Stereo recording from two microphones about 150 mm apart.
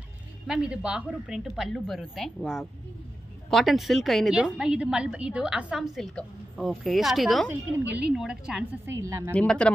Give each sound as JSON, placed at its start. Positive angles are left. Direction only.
{"t": 0.5, "sound": "a woman's voice", "side_deg": -5}
{"t": 9.0, "sound": "speech", "side_deg": -20}
{"t": 9.3, "sound": "speech", "side_deg": 10}